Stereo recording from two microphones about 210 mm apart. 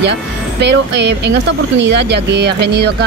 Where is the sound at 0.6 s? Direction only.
55° right (ahead or behind).